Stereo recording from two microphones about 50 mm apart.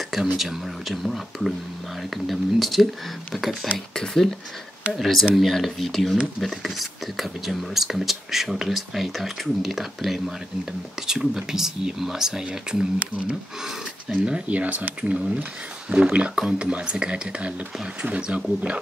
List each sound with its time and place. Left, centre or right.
0.1 s speech: centre
3.7 s speech: centre
13.7 s speech: centre
14.5 s speech: right